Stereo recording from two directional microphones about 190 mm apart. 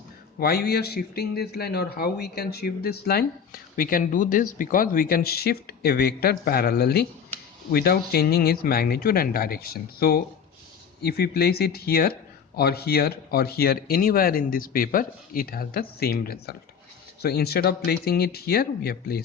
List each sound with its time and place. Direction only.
0.3 s speech: 55° left (ahead or behind)